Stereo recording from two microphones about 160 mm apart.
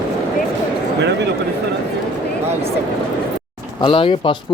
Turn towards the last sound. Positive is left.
turn(degrees=35)  # may be behind; listen again after turning